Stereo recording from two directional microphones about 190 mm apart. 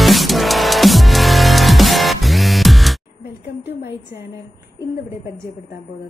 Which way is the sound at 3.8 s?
60° left (ahead or behind).